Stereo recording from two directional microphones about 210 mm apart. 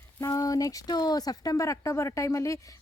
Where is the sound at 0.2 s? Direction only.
15° left (ahead or behind).